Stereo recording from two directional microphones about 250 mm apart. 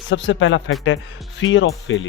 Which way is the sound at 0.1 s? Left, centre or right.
Left.